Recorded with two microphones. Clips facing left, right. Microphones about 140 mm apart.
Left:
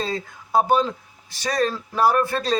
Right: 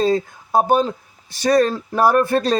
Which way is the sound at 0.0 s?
45° right (ahead or behind).